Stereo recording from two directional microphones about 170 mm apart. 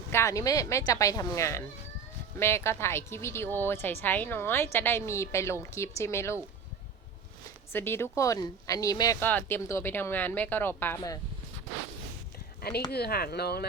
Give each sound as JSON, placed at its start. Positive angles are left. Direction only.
{"t": 0.1, "sound": "speech", "side_deg": 15}
{"t": 7.7, "sound": "speech", "side_deg": 15}
{"t": 12.9, "sound": "speech", "side_deg": 65}